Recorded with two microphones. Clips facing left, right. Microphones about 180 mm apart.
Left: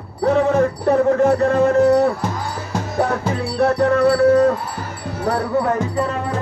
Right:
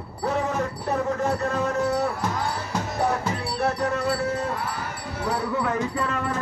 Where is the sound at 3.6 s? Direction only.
60° left (ahead or behind).